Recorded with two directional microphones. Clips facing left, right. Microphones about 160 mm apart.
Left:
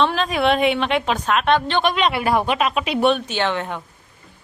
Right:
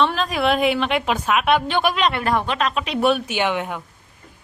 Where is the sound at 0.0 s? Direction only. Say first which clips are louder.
Left 1 dB; centre (ahead or behind).